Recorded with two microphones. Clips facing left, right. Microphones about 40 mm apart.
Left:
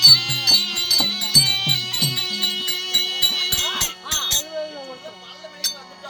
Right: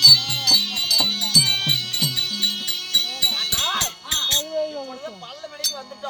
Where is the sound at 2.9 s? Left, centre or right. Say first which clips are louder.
Even; left.